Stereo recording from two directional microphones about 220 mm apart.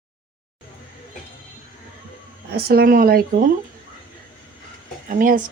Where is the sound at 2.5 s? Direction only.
45° right (ahead or behind).